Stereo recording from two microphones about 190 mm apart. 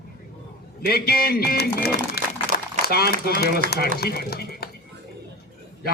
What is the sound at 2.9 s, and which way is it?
A woman's voice, 55° left (ahead or behind).